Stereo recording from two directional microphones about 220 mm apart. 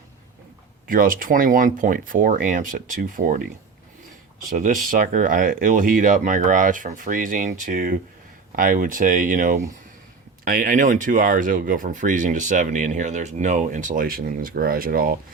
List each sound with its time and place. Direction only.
0.9 s speech: 40° right (ahead or behind)
4.4 s speech: 35° right (ahead or behind)